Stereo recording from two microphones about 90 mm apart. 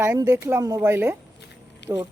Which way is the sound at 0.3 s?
30° right (ahead or behind).